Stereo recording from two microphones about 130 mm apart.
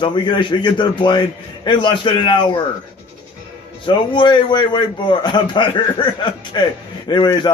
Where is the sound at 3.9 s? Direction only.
35° left (ahead or behind).